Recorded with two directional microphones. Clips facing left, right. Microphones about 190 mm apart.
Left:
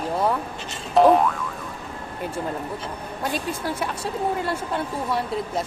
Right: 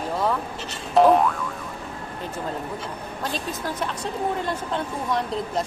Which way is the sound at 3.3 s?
10° left (ahead or behind).